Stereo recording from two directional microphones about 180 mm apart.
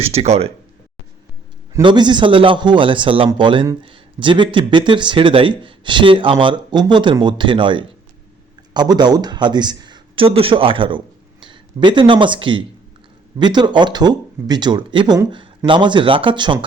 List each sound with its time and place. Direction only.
0.0 s speech: 35° right (ahead or behind)
1.8 s a man's voice: 25° right (ahead or behind)